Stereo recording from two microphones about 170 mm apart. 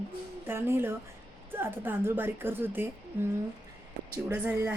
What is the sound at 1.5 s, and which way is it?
A woman's voice, 15° right (ahead or behind).